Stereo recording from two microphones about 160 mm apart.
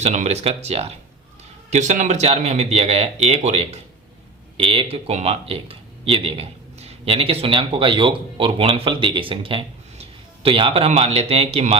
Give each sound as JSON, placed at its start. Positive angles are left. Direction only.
{"t": 0.0, "sound": "speech", "side_deg": -45}